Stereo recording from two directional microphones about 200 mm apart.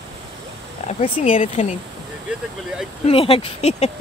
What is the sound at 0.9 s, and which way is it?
Speech, 35° left (ahead or behind).